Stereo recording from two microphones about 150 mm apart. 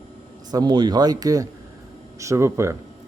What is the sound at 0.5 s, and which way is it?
Speech, 30° right (ahead or behind).